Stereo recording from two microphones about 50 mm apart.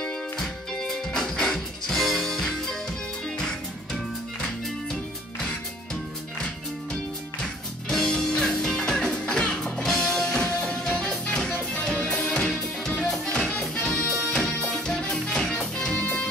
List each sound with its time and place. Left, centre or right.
0.0 s music: centre
7.9 s music: centre; by 12.4 s left
12.4 s music: centre